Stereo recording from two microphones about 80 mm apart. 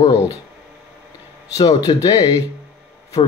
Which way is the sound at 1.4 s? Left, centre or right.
Left.